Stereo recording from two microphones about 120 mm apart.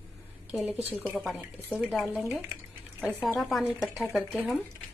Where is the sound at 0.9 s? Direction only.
15° left (ahead or behind).